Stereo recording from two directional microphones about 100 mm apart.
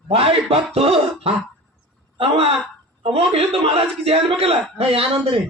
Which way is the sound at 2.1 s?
65° right (ahead or behind).